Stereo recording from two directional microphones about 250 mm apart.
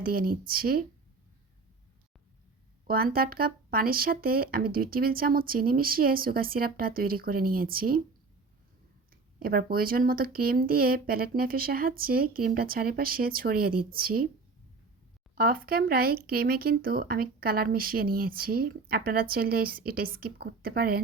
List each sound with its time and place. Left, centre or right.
0.0 s speech: right
2.8 s speech: right
9.4 s speech: right
15.4 s speech: right